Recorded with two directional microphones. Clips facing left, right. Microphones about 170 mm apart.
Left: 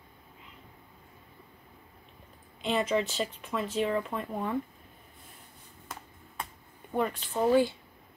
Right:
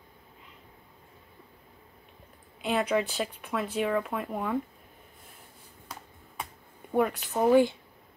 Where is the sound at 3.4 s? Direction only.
5° right (ahead or behind).